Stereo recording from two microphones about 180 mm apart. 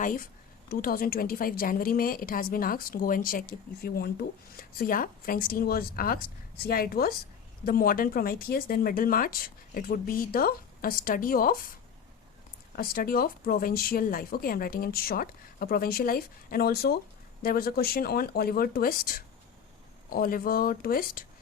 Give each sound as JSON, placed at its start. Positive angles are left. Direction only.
{"t": 0.0, "sound": "speech", "side_deg": 50}
{"t": 12.7, "sound": "speech", "side_deg": 55}